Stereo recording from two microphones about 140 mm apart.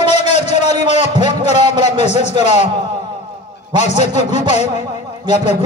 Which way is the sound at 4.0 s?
55° left (ahead or behind).